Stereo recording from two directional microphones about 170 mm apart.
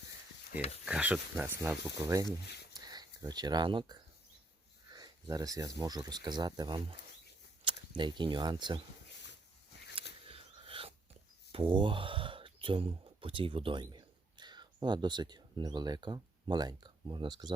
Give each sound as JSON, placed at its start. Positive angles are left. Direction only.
{"t": 0.9, "sound": "speech", "side_deg": -5}
{"t": 2.4, "sound": "speech", "side_deg": 75}
{"t": 2.7, "sound": "a sound", "side_deg": -25}
{"t": 4.9, "sound": "speech", "side_deg": -25}
{"t": 10.2, "sound": "whispering", "side_deg": -35}
{"t": 11.5, "sound": "speech", "side_deg": -30}